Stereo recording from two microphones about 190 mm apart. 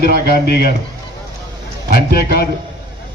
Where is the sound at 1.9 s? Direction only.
55° left (ahead or behind).